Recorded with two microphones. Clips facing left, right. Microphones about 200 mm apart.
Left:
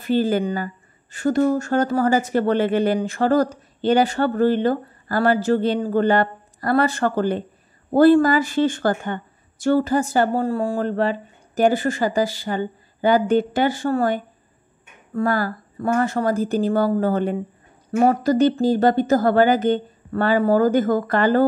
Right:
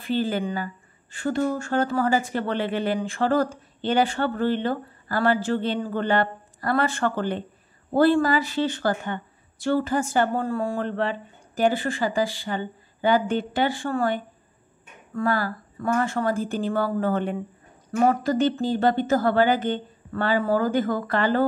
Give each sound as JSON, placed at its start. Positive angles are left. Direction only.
{"t": 0.0, "sound": "speech", "side_deg": 40}